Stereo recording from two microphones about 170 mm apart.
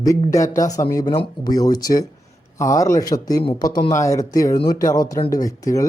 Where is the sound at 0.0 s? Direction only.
20° left (ahead or behind).